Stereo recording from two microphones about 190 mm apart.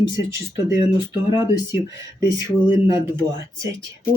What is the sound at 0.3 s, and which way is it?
Speech, 15° right (ahead or behind).